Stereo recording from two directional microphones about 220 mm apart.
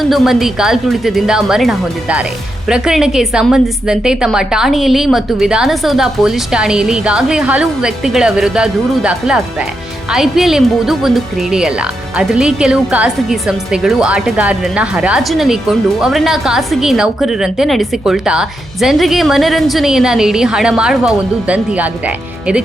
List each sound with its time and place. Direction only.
0.0 s a woman's voice: centre (ahead or behind)